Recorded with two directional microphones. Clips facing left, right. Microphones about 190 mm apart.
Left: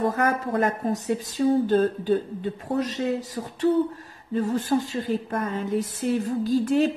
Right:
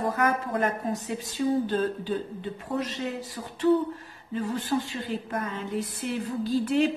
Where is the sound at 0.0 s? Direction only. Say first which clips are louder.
Left 3 dB; 45° left (ahead or behind).